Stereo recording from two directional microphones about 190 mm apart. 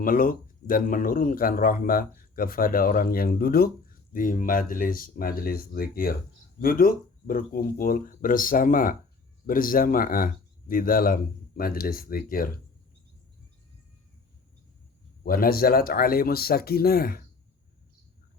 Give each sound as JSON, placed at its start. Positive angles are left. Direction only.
{"t": 0.0, "sound": "speech", "side_deg": 45}
{"t": 15.2, "sound": "speech", "side_deg": 50}